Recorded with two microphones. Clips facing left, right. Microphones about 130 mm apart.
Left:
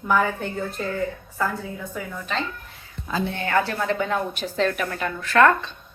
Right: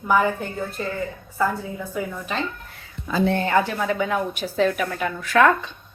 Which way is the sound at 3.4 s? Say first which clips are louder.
Right 2 dB; 20° right (ahead or behind).